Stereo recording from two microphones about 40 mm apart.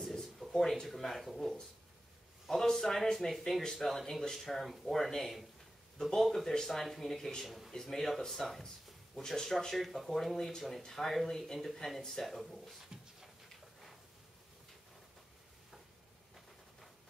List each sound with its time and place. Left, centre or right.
0.0 s speech: centre
2.6 s speech: centre
7.4 s a man's voice: centre
7.7 s speech: centre
9.1 s speech: centre
12.9 s a sound: centre